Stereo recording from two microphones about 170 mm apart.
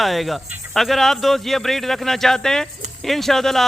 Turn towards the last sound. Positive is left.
turn(degrees=0)  # may be behind; listen again after turning